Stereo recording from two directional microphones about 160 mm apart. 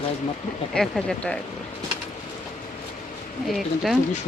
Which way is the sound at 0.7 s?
5° left (ahead or behind).